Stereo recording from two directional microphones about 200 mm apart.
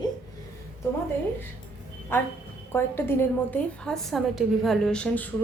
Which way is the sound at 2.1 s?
10° left (ahead or behind).